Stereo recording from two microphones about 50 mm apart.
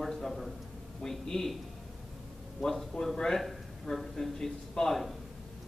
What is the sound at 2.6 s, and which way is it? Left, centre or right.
A man's voice, centre.